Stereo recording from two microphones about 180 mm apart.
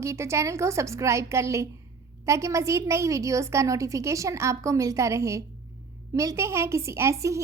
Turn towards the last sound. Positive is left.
turn(degrees=-15)  # may be behind; listen again after turning